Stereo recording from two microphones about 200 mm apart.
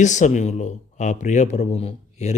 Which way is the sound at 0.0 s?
35° left (ahead or behind).